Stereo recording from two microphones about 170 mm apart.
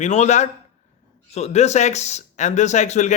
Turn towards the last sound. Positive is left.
turn(degrees=45)  # may be behind; listen again after turning